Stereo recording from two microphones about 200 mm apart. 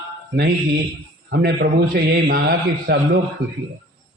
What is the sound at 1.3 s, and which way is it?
A man's voice, 50° right (ahead or behind).